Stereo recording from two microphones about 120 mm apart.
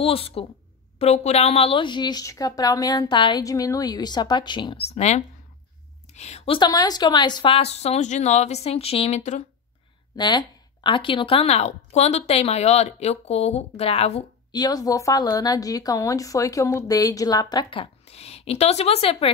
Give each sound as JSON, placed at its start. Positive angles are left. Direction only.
{"t": 0.0, "sound": "a woman's voice", "side_deg": 50}
{"t": 3.4, "sound": "a woman's voice", "side_deg": 30}
{"t": 4.9, "sound": "a woman's voice", "side_deg": 70}
{"t": 6.6, "sound": "a woman's voice", "side_deg": 35}
{"t": 10.1, "sound": "a woman's voice", "side_deg": 40}
{"t": 14.5, "sound": "a woman's voice", "side_deg": 35}
{"t": 17.6, "sound": "a woman's voice", "side_deg": 55}